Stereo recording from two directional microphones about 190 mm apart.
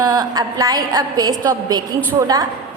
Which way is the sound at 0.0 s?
20° right (ahead or behind).